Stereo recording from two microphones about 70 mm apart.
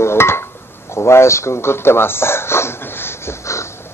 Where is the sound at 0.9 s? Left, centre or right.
Left.